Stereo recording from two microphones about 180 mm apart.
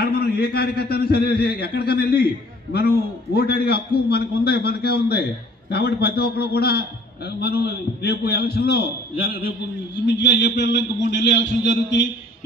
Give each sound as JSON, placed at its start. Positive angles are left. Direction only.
{"t": 0.0, "sound": "a man's voice", "side_deg": 60}
{"t": 10.0, "sound": "a man's voice", "side_deg": 75}